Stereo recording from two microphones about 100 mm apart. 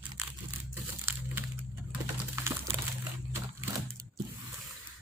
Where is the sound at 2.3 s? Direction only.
25° right (ahead or behind).